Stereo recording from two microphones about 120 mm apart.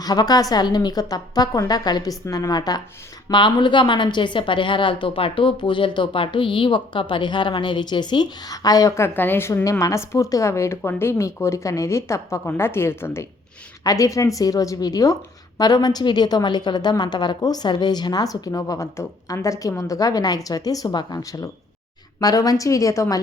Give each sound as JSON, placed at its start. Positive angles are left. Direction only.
{"t": 0.0, "sound": "a woman's voice", "side_deg": 30}